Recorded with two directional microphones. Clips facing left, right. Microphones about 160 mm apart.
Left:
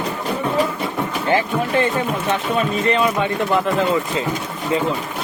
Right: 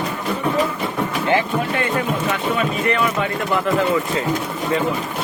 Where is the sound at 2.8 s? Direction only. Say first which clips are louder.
Left 2 dB; 25° left (ahead or behind).